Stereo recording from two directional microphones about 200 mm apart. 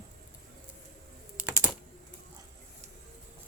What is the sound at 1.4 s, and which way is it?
Typing, 5° right (ahead or behind).